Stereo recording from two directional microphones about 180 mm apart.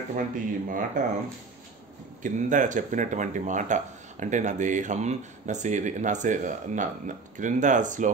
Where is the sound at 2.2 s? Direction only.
45° right (ahead or behind).